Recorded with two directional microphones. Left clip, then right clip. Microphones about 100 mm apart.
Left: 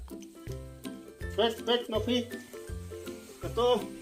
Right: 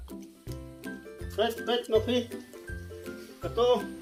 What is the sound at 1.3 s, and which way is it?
Speech, 45° left (ahead or behind).